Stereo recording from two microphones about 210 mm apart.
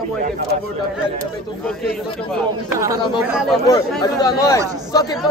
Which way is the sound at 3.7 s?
15° left (ahead or behind).